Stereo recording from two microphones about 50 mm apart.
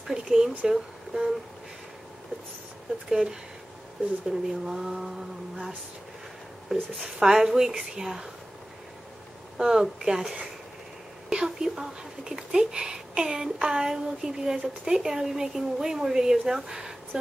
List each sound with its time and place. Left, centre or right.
0.0 s speech: centre
3.1 s speech: centre
7.0 s speech: centre
9.6 s speech: centre